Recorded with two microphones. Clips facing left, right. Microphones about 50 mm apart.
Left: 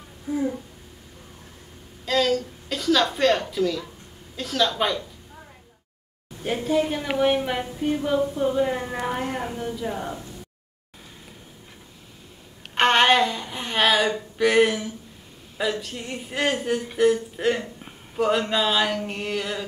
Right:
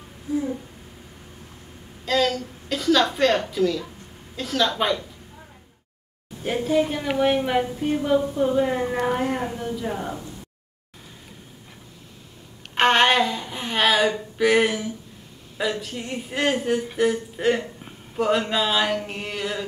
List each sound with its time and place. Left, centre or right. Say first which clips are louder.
2.0 s a woman's voice: even; centre
6.4 s a woman's voice: right 1 dB; centre
12.7 s a woman's voice: even; centre